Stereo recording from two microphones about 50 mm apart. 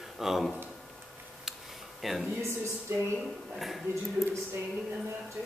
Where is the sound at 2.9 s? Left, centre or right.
Right.